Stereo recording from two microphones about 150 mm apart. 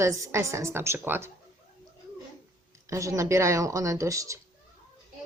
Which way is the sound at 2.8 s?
20° right (ahead or behind).